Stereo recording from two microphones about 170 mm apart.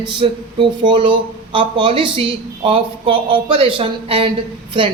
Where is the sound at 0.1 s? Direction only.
30° right (ahead or behind).